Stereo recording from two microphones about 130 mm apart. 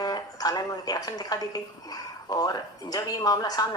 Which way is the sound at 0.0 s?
30° left (ahead or behind).